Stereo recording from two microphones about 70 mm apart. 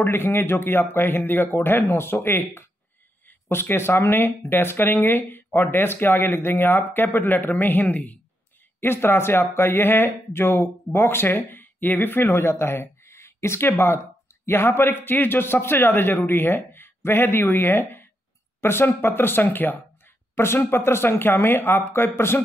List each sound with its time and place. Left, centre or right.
0.0 s speech: left
8.8 s speech: left
20.3 s speech: left